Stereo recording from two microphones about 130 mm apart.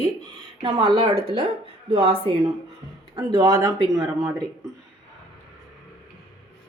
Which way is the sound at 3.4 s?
25° right (ahead or behind).